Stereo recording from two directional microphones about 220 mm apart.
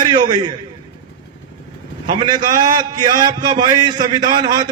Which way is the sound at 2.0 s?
20° right (ahead or behind).